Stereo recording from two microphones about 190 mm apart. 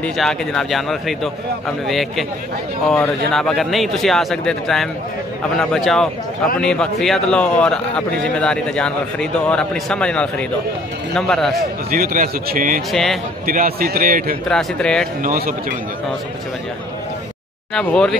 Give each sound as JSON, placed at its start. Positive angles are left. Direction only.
{"t": 0.0, "sound": "a man's voice", "side_deg": 5}
{"t": 11.9, "sound": "speech", "side_deg": -45}
{"t": 12.9, "sound": "a man's voice", "side_deg": 0}
{"t": 13.5, "sound": "speech", "side_deg": -50}
{"t": 14.5, "sound": "a man's voice", "side_deg": 5}
{"t": 15.2, "sound": "speech", "side_deg": -50}
{"t": 17.7, "sound": "a man's voice", "side_deg": 5}